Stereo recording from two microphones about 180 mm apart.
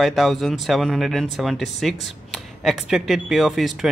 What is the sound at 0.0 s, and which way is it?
Speech, centre (ahead or behind).